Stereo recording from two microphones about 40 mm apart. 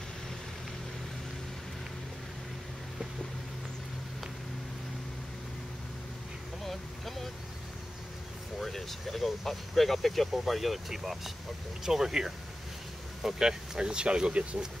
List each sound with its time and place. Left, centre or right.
6.6 s vehicle: centre
8.5 s speech: centre; by 14.7 s right